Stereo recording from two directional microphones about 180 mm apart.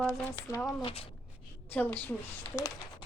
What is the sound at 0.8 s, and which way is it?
Speech, 35° left (ahead or behind).